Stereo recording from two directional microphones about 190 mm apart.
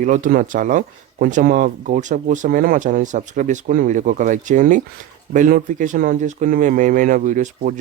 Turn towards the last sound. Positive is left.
turn(degrees=-40)  # may be behind; listen again after turning